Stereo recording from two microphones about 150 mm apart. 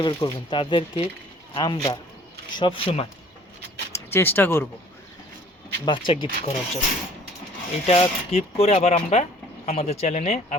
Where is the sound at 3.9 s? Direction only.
15° left (ahead or behind).